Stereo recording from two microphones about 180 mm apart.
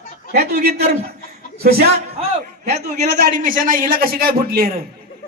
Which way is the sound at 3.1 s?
50° right (ahead or behind).